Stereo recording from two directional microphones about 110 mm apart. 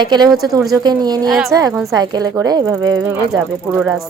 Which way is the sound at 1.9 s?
40° right (ahead or behind).